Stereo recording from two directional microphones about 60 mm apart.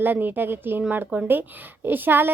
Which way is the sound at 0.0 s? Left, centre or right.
Right.